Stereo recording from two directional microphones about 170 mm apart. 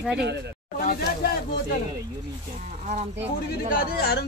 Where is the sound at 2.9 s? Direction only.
40° right (ahead or behind).